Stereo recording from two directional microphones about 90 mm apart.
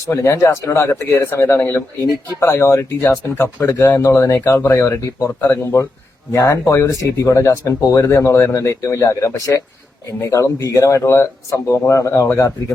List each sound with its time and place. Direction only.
0.1 s speech: 30° left (ahead or behind)